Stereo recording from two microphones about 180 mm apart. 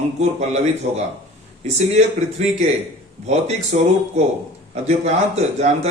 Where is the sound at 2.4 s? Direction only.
40° right (ahead or behind).